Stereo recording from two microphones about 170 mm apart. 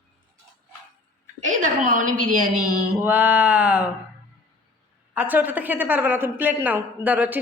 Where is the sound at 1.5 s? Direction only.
50° right (ahead or behind).